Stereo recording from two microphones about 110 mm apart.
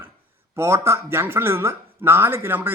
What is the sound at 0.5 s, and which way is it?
Speech, 25° right (ahead or behind).